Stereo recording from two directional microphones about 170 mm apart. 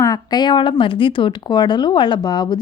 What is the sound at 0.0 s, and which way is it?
Speech, 25° left (ahead or behind).